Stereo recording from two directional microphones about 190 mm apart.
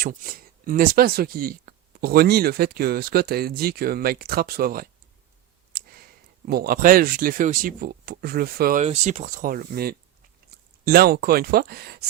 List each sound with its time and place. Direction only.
0.0 s speech: 45° right (ahead or behind)
8.8 s speech: 35° right (ahead or behind)
10.5 s a sound: 55° right (ahead or behind)
10.8 s speech: 50° right (ahead or behind)